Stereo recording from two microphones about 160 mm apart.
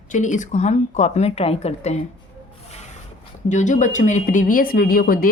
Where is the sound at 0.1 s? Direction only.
50° left (ahead or behind).